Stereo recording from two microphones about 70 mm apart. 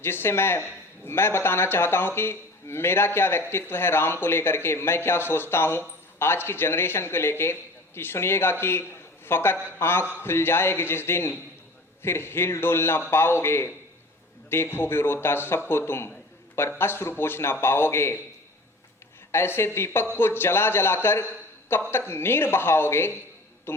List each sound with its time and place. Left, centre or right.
0.0 s a man's voice: left
19.3 s a man's voice: left
23.7 s a sound: left